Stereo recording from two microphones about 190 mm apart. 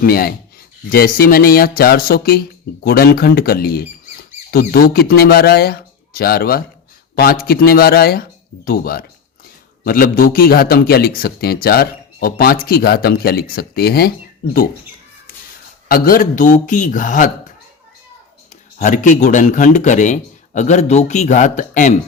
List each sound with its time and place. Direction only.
0.0 s a man's voice: 50° left (ahead or behind)
15.9 s a man's voice: 50° left (ahead or behind)
18.8 s speech: 40° left (ahead or behind)